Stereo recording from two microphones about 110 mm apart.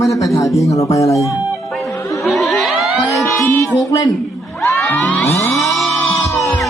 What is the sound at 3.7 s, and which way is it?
Speech, 30° left (ahead or behind).